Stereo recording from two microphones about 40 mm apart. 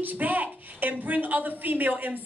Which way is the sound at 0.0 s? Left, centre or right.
Right.